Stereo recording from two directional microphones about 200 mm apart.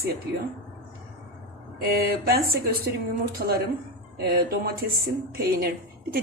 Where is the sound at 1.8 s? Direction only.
50° right (ahead or behind).